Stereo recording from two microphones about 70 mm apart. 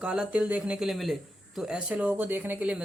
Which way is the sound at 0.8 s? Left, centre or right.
Centre.